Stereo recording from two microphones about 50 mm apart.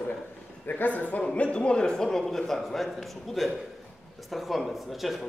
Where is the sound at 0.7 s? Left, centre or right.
Left.